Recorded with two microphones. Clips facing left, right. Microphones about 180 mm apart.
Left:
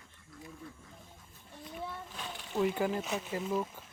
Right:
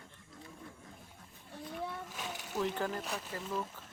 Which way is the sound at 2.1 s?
5° right (ahead or behind).